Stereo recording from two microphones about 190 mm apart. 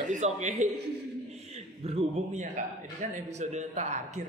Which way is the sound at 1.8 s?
30° right (ahead or behind).